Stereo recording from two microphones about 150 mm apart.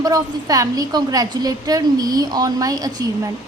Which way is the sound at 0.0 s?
25° right (ahead or behind).